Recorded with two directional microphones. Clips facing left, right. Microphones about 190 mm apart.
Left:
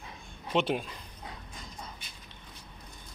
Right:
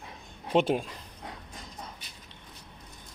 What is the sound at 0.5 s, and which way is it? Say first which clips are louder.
Speech: right 4 dB; 45° right (ahead or behind).